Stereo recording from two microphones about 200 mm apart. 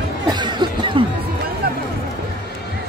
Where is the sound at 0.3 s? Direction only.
20° right (ahead or behind).